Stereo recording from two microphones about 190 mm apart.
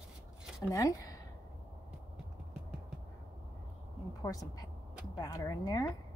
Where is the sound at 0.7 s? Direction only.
15° left (ahead or behind).